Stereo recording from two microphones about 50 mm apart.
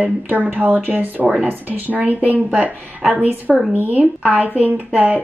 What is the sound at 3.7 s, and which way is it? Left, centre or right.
Speech, right.